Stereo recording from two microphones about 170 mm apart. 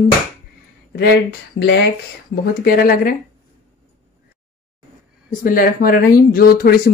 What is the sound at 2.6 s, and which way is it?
Speech, 60° left (ahead or behind).